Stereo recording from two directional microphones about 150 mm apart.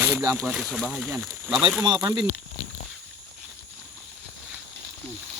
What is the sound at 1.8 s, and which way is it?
Speech, 30° right (ahead or behind).